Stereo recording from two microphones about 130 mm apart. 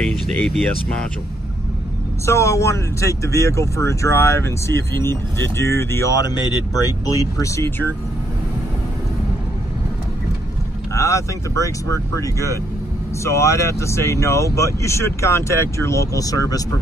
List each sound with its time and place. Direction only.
0.1 s speech: 5° left (ahead or behind)
2.2 s speech: 25° left (ahead or behind)
10.9 s speech: 20° left (ahead or behind)